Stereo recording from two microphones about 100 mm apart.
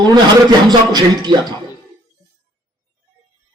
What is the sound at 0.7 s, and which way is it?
Speech, 45° right (ahead or behind).